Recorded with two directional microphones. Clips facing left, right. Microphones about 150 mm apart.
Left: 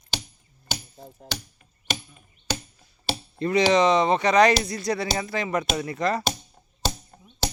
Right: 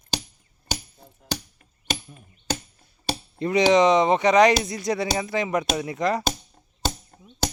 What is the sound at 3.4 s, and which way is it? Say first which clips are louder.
Speech: right 2 dB; 20° right (ahead or behind).